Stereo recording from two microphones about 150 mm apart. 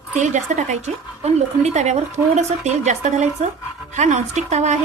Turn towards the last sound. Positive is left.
turn(degrees=-50)  # may be behind; listen again after turning